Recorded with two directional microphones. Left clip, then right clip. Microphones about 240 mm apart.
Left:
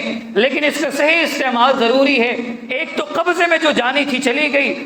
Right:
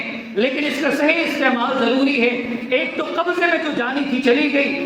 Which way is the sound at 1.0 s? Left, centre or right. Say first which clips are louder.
Left 3 dB; left.